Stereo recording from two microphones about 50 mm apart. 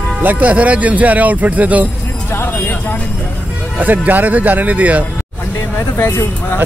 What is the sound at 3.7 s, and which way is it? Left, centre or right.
Speech, right.